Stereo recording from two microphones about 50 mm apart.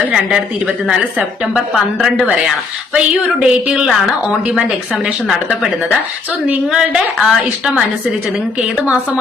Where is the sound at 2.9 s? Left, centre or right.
Right.